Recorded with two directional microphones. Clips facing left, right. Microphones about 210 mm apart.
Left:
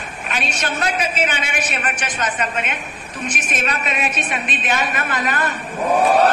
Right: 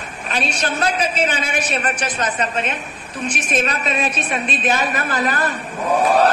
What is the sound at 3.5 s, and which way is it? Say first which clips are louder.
A woman's voice: right 4 dB; 35° right (ahead or behind).